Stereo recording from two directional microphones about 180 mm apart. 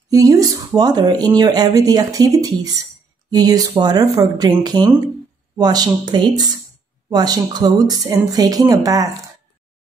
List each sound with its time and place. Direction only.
0.1 s speech: 20° right (ahead or behind)